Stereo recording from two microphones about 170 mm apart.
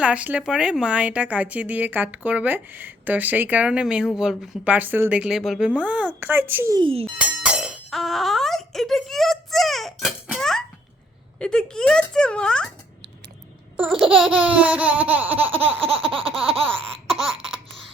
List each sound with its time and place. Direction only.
0.0 s speech: 5° right (ahead or behind)
6.7 s a sound: 30° right (ahead or behind)
7.2 s speech: 5° right (ahead or behind)
13.7 s speech: 5° right (ahead or behind)
15.8 s a sound: 35° right (ahead or behind)
16.6 s laughter: 5° left (ahead or behind)